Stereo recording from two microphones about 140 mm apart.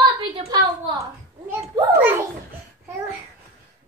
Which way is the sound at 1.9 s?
15° right (ahead or behind).